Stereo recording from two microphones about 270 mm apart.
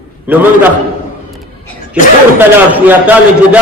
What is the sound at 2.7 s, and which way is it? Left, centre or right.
Speech, centre.